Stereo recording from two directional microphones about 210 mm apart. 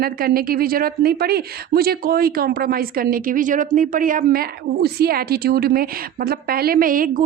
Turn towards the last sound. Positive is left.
turn(degrees=-40)  # may be behind; listen again after turning